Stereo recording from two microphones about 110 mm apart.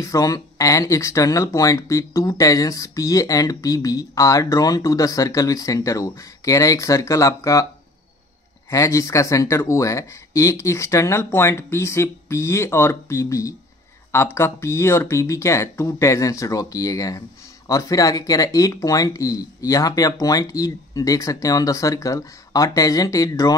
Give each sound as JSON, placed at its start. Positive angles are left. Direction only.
{"t": 0.0, "sound": "speech", "side_deg": 30}
{"t": 8.6, "sound": "speech", "side_deg": 30}